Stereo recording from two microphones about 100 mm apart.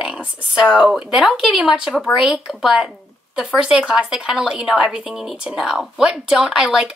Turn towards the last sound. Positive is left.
turn(degrees=-5)  # may be behind; listen again after turning